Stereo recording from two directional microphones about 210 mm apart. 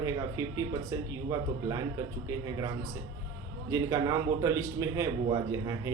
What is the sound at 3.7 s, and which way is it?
Speech, 15° right (ahead or behind).